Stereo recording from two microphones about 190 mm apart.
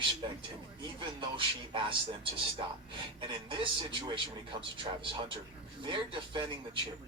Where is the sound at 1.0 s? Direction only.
25° right (ahead or behind).